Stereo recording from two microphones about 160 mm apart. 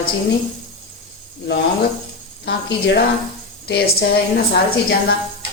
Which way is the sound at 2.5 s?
90° left.